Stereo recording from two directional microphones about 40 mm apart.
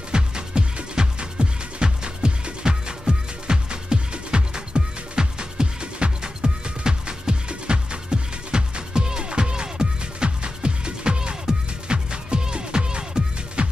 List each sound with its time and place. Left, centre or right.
0.1 s music: right